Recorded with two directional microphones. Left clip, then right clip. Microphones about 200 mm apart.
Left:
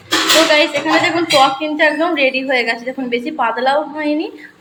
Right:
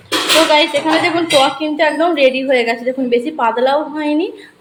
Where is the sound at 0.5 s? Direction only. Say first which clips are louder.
Right 1 dB; 15° right (ahead or behind).